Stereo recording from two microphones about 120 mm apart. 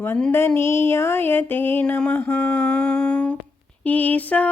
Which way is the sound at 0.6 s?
20° left (ahead or behind).